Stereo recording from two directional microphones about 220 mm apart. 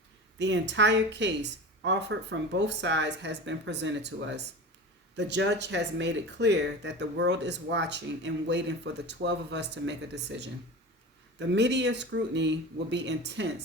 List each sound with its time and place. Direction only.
0.3 s speech: 55° right (ahead or behind)